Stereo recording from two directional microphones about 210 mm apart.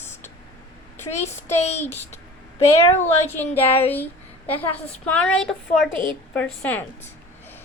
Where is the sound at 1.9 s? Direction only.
30° left (ahead or behind).